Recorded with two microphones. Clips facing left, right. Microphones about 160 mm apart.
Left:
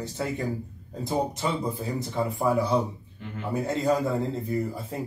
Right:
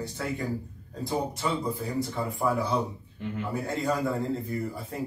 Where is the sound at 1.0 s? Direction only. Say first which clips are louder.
Left 2 dB; 20° left (ahead or behind).